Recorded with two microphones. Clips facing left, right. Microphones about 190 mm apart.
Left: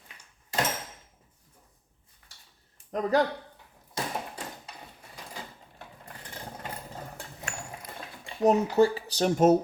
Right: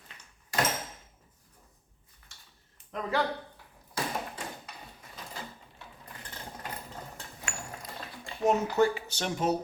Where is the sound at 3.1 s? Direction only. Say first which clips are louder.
Left 5 dB; 40° left (ahead or behind).